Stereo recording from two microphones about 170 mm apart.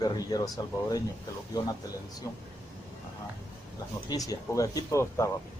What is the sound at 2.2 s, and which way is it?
Speech, 20° left (ahead or behind).